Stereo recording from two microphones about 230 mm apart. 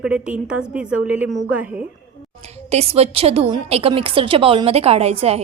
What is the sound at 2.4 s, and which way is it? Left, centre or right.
A woman's voice, right.